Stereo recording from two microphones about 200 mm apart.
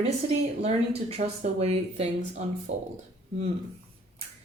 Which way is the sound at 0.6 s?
30° right (ahead or behind).